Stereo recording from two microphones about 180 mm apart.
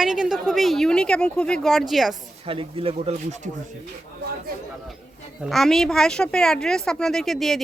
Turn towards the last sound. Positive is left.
turn(degrees=0)  # may be behind; listen again after turning